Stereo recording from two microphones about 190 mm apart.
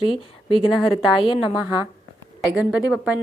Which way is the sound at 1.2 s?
25° left (ahead or behind).